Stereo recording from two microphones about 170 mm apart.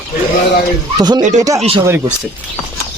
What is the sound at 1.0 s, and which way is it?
Speech, 25° right (ahead or behind).